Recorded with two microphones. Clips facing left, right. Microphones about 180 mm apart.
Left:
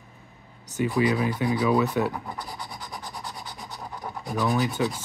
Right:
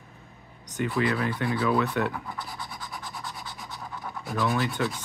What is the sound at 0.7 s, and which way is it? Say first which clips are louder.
Speech: left 3 dB; 10° left (ahead or behind).